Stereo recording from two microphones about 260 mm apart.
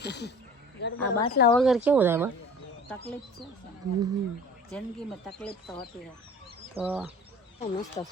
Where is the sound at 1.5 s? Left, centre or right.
Centre.